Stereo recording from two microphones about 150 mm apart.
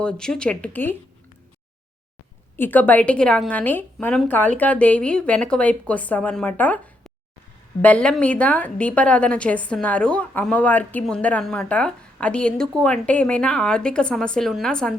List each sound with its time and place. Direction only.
0.0 s a woman's voice: 5° left (ahead or behind)
2.6 s a woman's voice: 10° left (ahead or behind)